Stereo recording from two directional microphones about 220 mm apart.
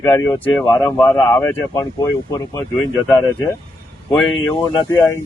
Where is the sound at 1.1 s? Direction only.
15° left (ahead or behind).